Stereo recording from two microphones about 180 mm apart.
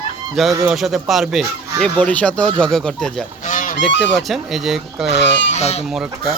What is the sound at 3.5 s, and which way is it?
Goose, 45° left (ahead or behind).